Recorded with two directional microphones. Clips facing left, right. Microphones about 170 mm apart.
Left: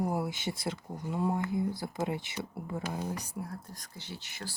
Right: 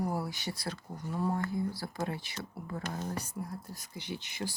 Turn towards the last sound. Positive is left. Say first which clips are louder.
# right 5 dB
turn(degrees=-15)  # may be behind; listen again after turning